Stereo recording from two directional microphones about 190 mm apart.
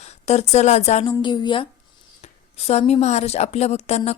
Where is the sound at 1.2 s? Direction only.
25° left (ahead or behind).